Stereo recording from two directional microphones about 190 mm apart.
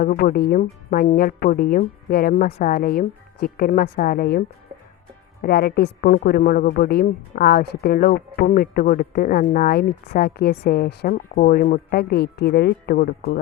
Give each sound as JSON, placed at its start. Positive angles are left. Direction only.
{"t": 0.0, "sound": "a woman's voice", "side_deg": 50}